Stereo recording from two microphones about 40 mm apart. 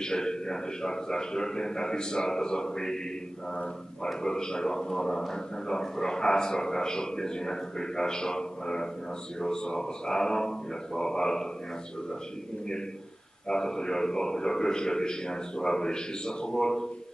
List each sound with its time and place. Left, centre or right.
0.0 s speech: centre
4.2 s speech: centre
13.5 s speech: centre